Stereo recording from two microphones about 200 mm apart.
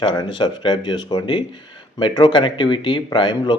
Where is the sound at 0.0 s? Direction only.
20° left (ahead or behind).